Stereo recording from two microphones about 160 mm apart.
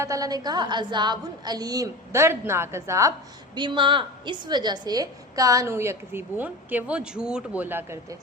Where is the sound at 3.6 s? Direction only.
30° right (ahead or behind); by 8.0 s 15° right (ahead or behind).